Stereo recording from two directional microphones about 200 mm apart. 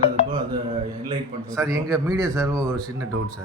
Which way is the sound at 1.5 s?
15° right (ahead or behind).